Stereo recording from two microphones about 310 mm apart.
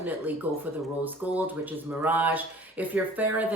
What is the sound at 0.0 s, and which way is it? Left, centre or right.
Speech, centre.